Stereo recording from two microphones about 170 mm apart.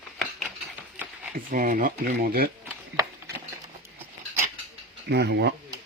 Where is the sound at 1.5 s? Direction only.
55° right (ahead or behind).